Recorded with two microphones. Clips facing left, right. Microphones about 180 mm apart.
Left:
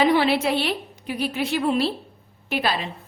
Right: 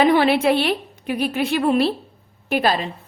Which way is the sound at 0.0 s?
55° right (ahead or behind).